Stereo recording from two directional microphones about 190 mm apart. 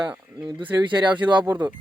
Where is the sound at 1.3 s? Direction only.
25° right (ahead or behind).